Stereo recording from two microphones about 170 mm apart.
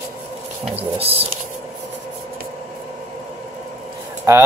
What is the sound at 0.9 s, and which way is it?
Speech, 35° right (ahead or behind).